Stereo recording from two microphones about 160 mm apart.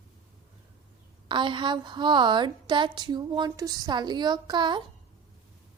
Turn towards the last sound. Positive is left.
turn(degrees=-30)  # may be behind; listen again after turning